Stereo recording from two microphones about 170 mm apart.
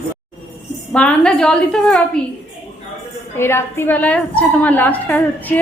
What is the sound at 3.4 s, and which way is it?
A woman's voice, 15° left (ahead or behind).